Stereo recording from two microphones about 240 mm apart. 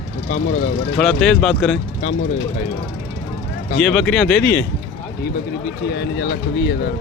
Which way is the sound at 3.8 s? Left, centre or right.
Centre.